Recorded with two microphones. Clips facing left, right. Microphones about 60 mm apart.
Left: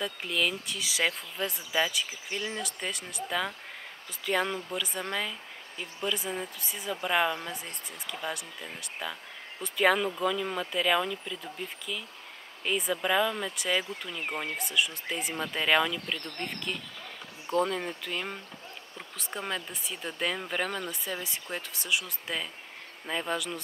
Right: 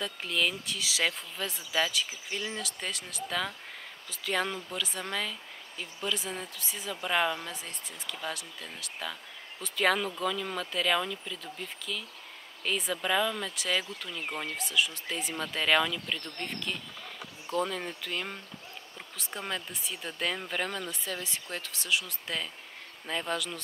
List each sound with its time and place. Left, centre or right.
0.0 s speech: centre
1.4 s speech: left
2.8 s speech: centre
14.2 s speech: left
15.3 s speech: centre
17.6 s speech: centre